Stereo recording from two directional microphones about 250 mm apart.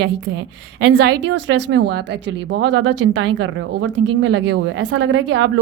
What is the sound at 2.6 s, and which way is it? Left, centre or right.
Speech, right.